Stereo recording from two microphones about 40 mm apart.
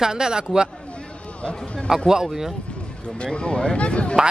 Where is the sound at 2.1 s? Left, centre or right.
Centre.